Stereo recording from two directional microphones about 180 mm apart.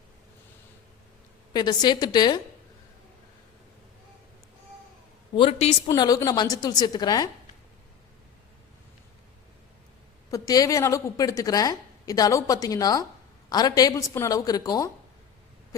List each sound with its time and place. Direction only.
1.5 s a woman's voice: 25° left (ahead or behind)
5.3 s a woman's voice: 30° left (ahead or behind)
5.9 s a woman's voice: 20° left (ahead or behind)
10.3 s a woman's voice: 20° left (ahead or behind)